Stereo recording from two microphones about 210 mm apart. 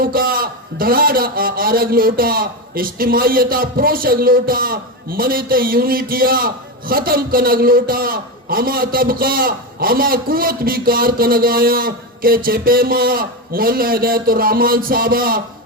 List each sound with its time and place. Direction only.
0.0 s a man's voice: 45° right (ahead or behind)